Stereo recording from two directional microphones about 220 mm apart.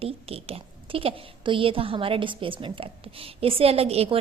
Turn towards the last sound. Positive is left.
turn(degrees=-25)  # may be behind; listen again after turning